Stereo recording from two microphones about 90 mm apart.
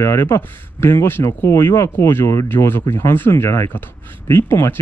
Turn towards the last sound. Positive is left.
turn(degrees=30)  # may be behind; listen again after turning